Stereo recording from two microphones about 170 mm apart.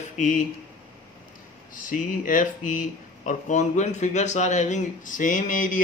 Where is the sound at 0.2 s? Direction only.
50° left (ahead or behind).